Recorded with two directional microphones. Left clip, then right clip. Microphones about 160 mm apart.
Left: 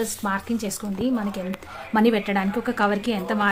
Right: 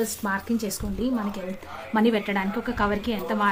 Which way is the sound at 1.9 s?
45° left (ahead or behind).